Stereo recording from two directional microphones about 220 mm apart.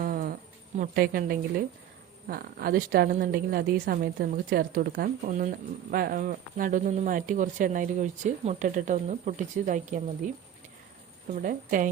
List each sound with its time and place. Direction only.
0.0 s a sound: 40° right (ahead or behind)
0.8 s a woman's voice: 40° right (ahead or behind)
11.3 s a woman's voice: 35° right (ahead or behind)